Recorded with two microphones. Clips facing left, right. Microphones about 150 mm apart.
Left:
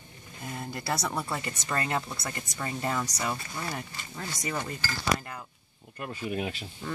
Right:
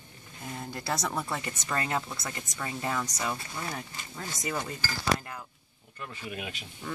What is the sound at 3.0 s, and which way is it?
Speech, 10° left (ahead or behind).